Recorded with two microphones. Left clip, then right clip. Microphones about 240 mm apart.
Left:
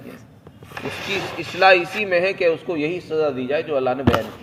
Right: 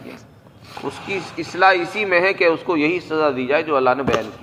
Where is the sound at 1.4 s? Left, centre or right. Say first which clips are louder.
Right 1 dB; centre.